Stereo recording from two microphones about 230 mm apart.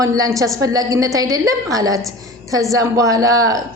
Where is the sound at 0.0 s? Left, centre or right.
Centre.